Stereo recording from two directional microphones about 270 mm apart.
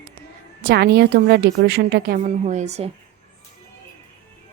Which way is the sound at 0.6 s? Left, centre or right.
Right.